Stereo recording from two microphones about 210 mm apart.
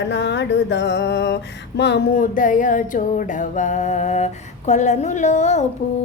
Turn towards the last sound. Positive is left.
turn(degrees=35)  # may be behind; listen again after turning